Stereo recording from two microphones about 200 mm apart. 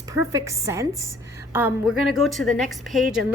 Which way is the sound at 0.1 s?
15° right (ahead or behind).